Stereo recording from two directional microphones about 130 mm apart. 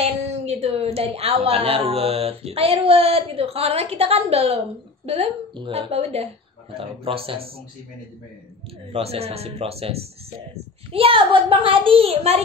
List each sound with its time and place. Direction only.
0.0 s a woman's voice: 55° right (ahead or behind)
8.9 s a woman's voice: 50° right (ahead or behind)